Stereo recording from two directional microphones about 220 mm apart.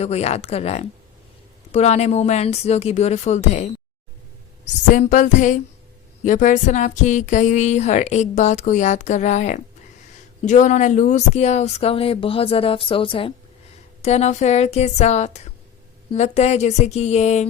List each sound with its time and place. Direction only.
0.0 s speech: 30° left (ahead or behind)
4.9 s speech: 35° left (ahead or behind)